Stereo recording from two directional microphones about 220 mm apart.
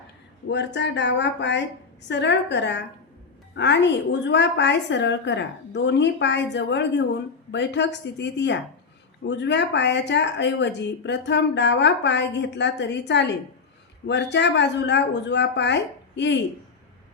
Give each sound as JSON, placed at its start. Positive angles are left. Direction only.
{"t": 0.4, "sound": "speech", "side_deg": 50}